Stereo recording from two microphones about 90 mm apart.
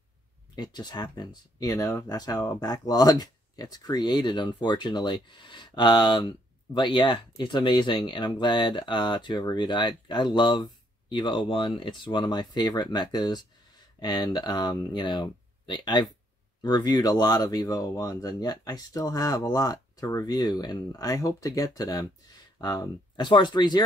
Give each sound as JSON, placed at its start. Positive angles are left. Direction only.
{"t": 0.6, "sound": "speech", "side_deg": 50}